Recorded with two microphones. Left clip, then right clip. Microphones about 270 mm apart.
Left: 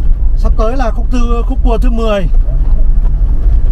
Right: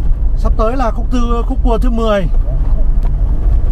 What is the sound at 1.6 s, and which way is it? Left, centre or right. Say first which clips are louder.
Speech: even; centre.